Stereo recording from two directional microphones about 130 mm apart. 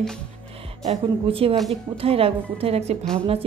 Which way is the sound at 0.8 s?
45° right (ahead or behind).